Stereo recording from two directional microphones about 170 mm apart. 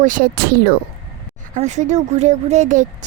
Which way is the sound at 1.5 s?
45° right (ahead or behind).